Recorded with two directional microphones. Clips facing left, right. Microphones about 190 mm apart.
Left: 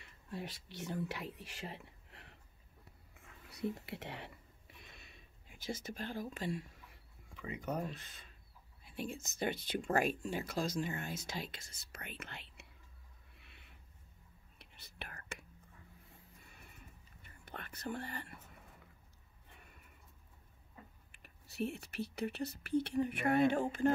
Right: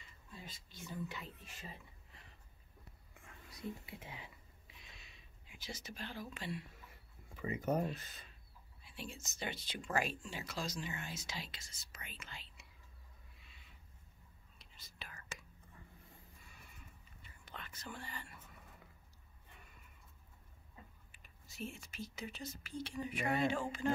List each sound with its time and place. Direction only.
0.0 s speech: 70° left (ahead or behind)
3.4 s whispering: 70° left (ahead or behind); by 6.7 s 45° left (ahead or behind)
7.6 s speech: 40° right (ahead or behind)
8.8 s speech: 50° left (ahead or behind)
13.4 s a sound: 60° left (ahead or behind)
14.6 s whispering: 65° left (ahead or behind)
17.2 s whispering: 55° left (ahead or behind)
21.1 s speech: 65° left (ahead or behind)